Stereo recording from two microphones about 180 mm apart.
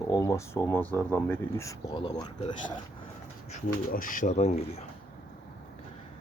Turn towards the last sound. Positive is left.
turn(degrees=35)  # may be behind; listen again after turning